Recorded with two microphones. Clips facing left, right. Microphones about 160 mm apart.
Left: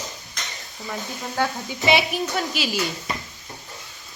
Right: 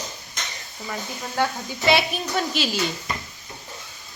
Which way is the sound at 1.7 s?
15° left (ahead or behind).